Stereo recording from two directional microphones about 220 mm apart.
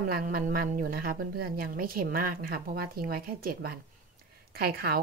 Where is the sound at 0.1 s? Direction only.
40° right (ahead or behind).